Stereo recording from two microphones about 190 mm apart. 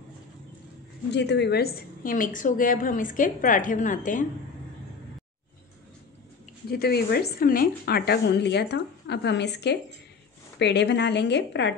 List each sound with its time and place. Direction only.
1.1 s a woman's voice: 65° left (ahead or behind); by 4.3 s 45° left (ahead or behind)
6.7 s a woman's voice: 55° left (ahead or behind)